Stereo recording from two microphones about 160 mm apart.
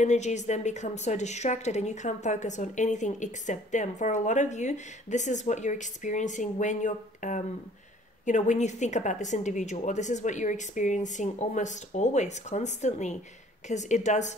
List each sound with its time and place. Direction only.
0.0 s a woman's voice: 45° left (ahead or behind)